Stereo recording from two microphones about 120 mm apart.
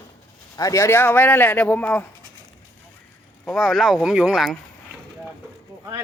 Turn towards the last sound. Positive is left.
turn(degrees=0)  # may be behind; listen again after turning